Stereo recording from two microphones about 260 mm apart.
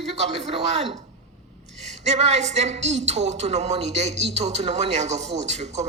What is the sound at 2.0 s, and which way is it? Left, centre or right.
A woman's voice, right.